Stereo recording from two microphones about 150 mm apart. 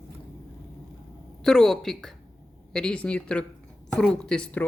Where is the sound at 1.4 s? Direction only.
Centre (ahead or behind).